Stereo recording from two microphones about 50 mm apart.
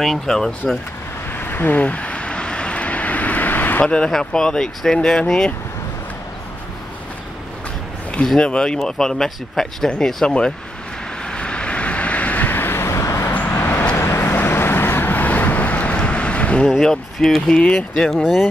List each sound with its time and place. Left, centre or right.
0.0 s speech: centre
1.3 s vehicle: left
3.8 s speech: centre
8.4 s speech: centre
11.2 s vehicle: left
12.9 s vehicle: left
13.3 s vehicle: left
13.9 s vehicle: left
14.3 s vehicle: left
16.6 s speech: centre
17.5 s speech: centre